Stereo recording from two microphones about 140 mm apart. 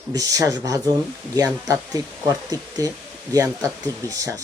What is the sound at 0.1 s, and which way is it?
Speech, 25° right (ahead or behind).